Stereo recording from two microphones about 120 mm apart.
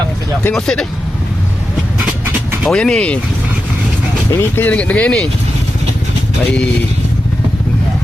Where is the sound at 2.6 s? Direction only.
5° left (ahead or behind).